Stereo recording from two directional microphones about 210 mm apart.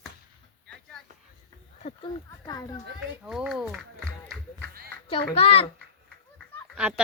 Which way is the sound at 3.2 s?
Centre (ahead or behind).